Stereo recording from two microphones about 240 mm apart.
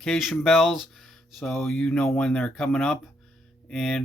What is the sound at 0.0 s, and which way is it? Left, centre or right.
Speech, centre.